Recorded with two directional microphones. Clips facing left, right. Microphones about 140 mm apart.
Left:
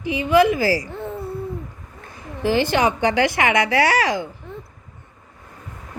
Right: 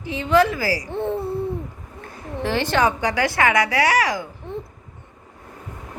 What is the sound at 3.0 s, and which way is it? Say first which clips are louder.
Speech: left 2 dB; 25° left (ahead or behind).